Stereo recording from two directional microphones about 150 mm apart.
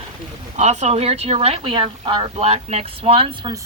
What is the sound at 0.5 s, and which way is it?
Speech, 50° right (ahead or behind).